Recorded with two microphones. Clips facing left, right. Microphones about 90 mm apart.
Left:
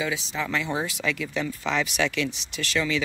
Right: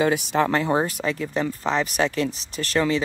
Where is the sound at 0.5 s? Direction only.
50° right (ahead or behind).